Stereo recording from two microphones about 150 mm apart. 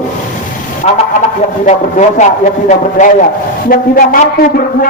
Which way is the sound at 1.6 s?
55° left (ahead or behind).